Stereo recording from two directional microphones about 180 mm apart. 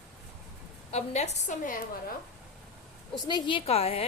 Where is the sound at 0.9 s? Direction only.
40° left (ahead or behind).